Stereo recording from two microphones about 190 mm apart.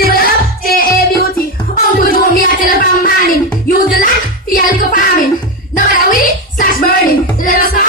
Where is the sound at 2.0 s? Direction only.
50° left (ahead or behind).